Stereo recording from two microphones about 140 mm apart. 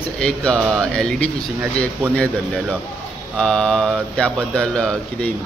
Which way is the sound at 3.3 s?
5° left (ahead or behind).